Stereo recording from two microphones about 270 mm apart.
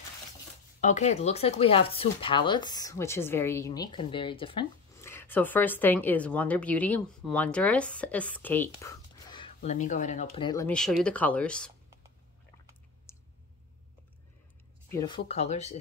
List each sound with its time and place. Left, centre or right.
0.7 s speech: left; by 11.7 s centre
14.9 s speech: centre